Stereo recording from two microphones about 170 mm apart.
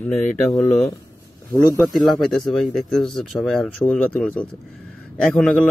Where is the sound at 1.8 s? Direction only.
Centre (ahead or behind).